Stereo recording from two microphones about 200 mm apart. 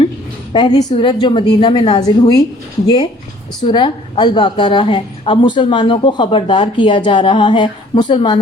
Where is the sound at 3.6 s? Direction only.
25° left (ahead or behind).